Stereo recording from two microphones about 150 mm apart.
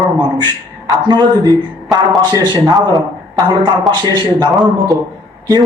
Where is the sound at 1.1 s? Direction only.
25° right (ahead or behind).